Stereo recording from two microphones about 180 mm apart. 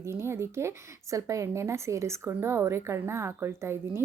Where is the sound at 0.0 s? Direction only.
15° right (ahead or behind).